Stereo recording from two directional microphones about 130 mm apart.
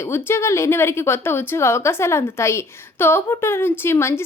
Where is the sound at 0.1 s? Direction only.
20° left (ahead or behind).